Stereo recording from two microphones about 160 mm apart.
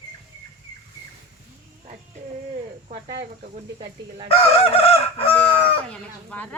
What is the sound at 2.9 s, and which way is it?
Speech, 90° right.